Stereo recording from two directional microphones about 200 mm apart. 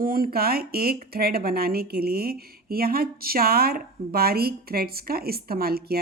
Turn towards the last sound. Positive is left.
turn(degrees=-50)  # may be behind; listen again after turning